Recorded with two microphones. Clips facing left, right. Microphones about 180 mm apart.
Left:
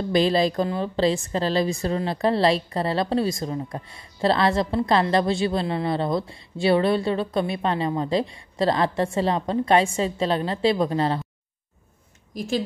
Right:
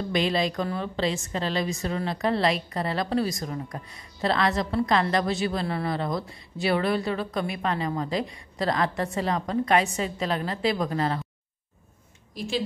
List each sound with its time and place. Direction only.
0.1 s a woman's voice: 35° left (ahead or behind)
12.4 s a woman's voice: 45° left (ahead or behind)